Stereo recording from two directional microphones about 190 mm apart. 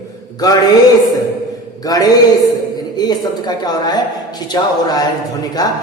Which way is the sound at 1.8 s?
20° left (ahead or behind).